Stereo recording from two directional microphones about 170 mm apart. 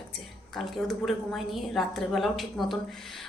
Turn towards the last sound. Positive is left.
turn(degrees=0)  # may be behind; listen again after turning